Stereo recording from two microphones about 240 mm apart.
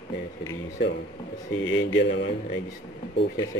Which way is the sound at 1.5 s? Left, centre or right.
Left.